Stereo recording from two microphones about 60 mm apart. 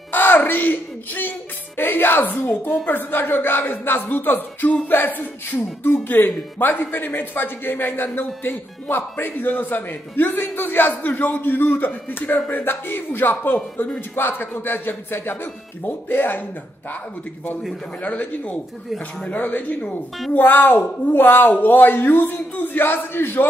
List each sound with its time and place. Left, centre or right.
0.1 s speech: left
18.0 s speech: left